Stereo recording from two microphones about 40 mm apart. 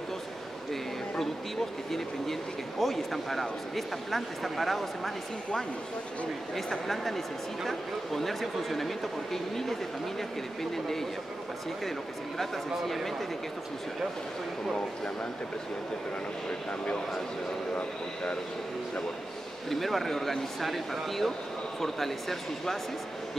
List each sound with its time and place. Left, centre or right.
1.9 s speech: centre
7.6 s speech: centre
12.4 s speech: centre
16.4 s speech: left
19.7 s speech: centre